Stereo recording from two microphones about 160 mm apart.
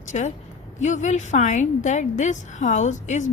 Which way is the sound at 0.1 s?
50° left (ahead or behind).